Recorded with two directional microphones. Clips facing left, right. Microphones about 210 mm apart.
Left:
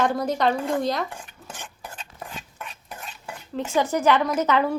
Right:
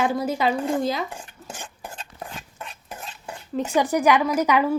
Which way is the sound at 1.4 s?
25° right (ahead or behind).